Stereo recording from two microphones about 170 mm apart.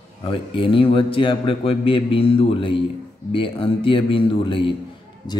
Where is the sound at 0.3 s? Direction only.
30° left (ahead or behind).